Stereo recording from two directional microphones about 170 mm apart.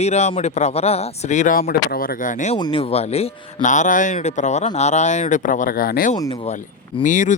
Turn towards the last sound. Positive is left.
turn(degrees=45)  # may be behind; listen again after turning